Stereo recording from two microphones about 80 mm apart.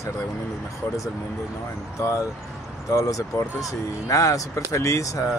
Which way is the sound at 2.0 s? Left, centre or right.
Left.